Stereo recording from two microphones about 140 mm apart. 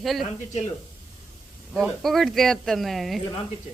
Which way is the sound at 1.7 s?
Centre (ahead or behind).